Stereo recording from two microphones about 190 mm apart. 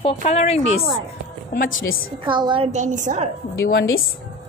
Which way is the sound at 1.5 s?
50° left (ahead or behind).